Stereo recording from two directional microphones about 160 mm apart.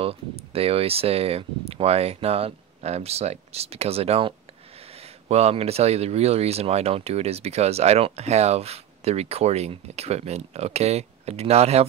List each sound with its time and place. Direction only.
0.0 s speech: 35° right (ahead or behind)